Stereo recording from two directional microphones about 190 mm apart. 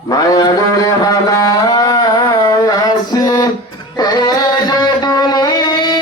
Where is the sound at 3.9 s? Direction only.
20° left (ahead or behind).